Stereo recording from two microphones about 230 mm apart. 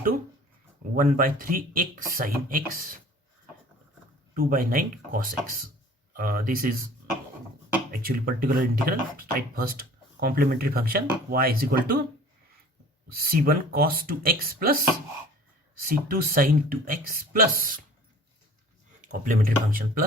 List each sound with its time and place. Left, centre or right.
0.9 s speech: right
4.4 s speech: right
7.9 s speech: right
13.1 s speech: right
15.9 s speech: right
19.0 s speech: right